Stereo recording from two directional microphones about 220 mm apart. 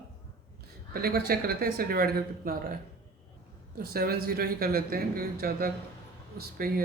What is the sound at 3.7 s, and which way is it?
Speech, 45° right (ahead or behind).